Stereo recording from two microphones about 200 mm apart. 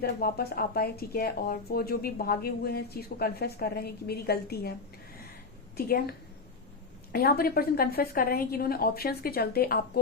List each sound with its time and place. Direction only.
0.0 s speech: 50° left (ahead or behind)
5.7 s a woman's voice: 50° left (ahead or behind)